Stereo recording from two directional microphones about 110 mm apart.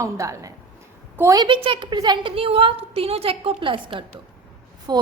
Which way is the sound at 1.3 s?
40° right (ahead or behind).